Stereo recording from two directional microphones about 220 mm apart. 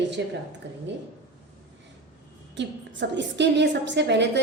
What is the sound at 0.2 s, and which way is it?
Speech, 50° right (ahead or behind).